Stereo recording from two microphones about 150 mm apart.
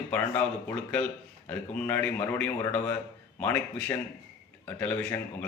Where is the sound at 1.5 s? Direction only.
10° left (ahead or behind).